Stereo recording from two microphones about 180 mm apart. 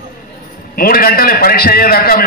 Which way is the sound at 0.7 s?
55° left (ahead or behind).